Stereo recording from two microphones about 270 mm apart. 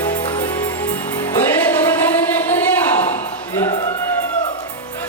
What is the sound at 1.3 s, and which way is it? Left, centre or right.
Music, centre.